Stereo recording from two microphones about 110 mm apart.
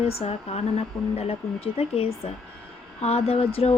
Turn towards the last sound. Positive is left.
turn(degrees=65)  # may be behind; listen again after turning